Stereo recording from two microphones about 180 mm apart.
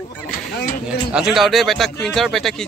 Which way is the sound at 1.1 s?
5° right (ahead or behind).